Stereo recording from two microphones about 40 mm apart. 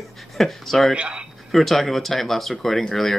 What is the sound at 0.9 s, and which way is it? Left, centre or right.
Speech, right.